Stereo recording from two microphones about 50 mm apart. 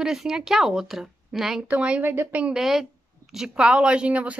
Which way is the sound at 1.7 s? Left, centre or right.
Right.